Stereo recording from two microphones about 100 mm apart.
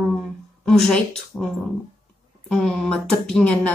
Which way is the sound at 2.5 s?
5° left (ahead or behind).